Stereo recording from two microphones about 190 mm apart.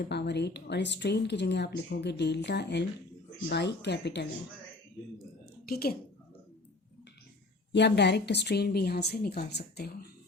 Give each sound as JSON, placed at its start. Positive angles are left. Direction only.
{"t": 0.0, "sound": "speech", "side_deg": 60}
{"t": 5.6, "sound": "a woman's voice", "side_deg": 55}
{"t": 7.7, "sound": "speech", "side_deg": 65}